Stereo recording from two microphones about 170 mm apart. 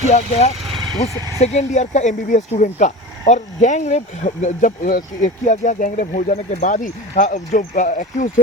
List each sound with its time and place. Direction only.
0.1 s speech: 40° left (ahead or behind)
0.6 s vehicle: centre (ahead or behind)
1.4 s speech: 40° left (ahead or behind)